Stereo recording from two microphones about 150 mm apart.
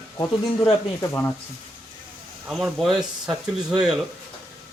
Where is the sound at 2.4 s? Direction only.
Centre (ahead or behind).